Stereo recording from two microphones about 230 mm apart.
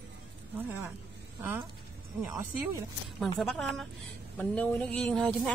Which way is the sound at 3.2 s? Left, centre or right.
Centre.